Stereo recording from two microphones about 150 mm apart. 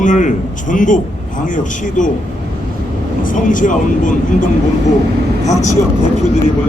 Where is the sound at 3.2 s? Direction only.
60° left (ahead or behind).